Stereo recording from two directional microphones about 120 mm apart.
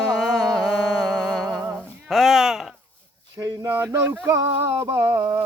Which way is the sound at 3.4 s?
25° right (ahead or behind).